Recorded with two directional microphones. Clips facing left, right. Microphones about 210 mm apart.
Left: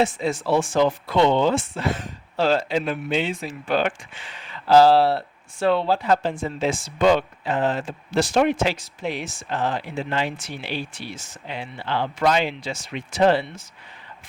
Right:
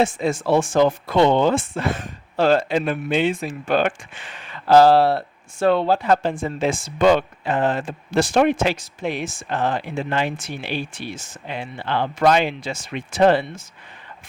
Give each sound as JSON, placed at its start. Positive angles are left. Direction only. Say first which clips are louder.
{"t": 0.0, "sound": "speech", "louder": "right 2 dB", "side_deg": -50}